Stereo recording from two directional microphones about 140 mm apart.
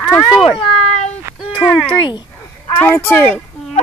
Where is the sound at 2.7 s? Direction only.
15° left (ahead or behind).